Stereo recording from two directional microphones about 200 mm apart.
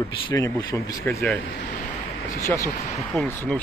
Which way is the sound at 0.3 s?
15° left (ahead or behind).